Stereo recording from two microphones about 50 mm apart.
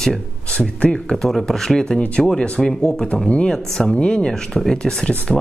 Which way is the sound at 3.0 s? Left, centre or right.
Centre.